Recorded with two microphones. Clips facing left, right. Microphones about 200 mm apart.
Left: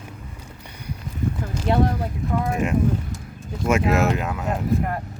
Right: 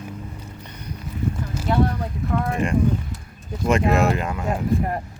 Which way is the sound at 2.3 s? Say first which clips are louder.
Even; 5° left (ahead or behind).